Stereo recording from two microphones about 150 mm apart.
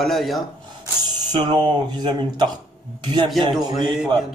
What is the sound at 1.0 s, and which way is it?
Speech, 30° right (ahead or behind).